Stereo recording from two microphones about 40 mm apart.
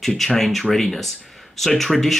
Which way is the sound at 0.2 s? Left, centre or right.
Centre.